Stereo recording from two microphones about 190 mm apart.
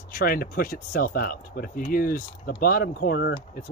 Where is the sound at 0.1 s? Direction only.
50° left (ahead or behind).